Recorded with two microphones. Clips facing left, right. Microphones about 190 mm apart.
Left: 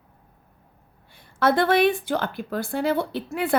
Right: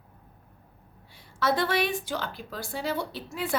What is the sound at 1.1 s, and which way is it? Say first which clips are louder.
A woman's voice: left 6 dB; 55° left (ahead or behind).